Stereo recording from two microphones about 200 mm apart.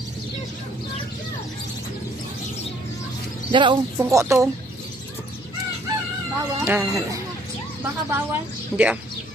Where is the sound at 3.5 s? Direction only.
25° right (ahead or behind).